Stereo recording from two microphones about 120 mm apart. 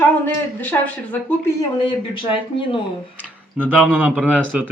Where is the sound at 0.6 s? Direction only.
15° left (ahead or behind).